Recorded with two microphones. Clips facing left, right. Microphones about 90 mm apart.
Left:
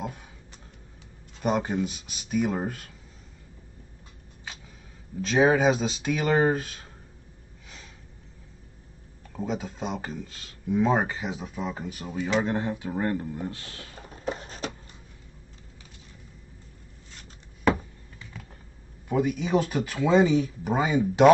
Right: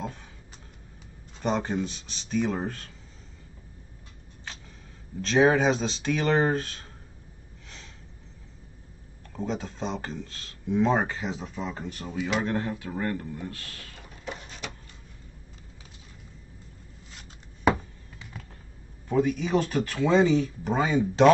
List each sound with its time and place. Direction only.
1.4 s speech: 10° left (ahead or behind)
5.2 s speech: 5° left (ahead or behind)
9.3 s speech: 5° left (ahead or behind)
12.5 s speech: 20° left (ahead or behind)
13.9 s a sound: 40° left (ahead or behind)
19.0 s speech: 10° left (ahead or behind)